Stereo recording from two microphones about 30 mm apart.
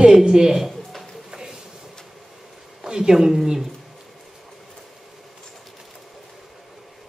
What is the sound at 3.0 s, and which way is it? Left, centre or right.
Speech, centre.